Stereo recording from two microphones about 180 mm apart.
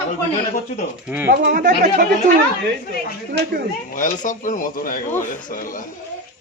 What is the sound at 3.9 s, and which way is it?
Speech, 45° left (ahead or behind).